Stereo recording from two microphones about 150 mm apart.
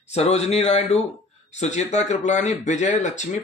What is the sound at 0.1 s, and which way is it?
Speech, 45° left (ahead or behind).